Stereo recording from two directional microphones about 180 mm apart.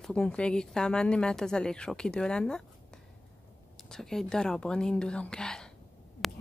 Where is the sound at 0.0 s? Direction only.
5° left (ahead or behind).